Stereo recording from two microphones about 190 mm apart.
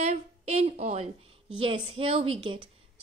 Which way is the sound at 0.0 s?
35° right (ahead or behind).